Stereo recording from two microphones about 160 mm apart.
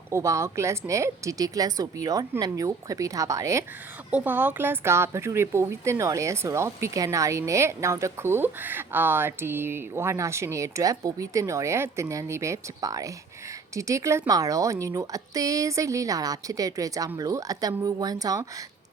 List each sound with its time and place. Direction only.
0.1 s a woman's voice: 20° right (ahead or behind)